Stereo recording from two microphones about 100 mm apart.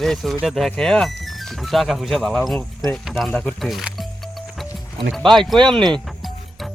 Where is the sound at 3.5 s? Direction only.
Centre (ahead or behind).